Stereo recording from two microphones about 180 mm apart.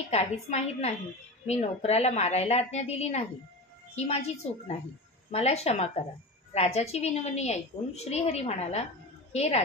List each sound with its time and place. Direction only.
0.1 s a woman's voice: 35° left (ahead or behind)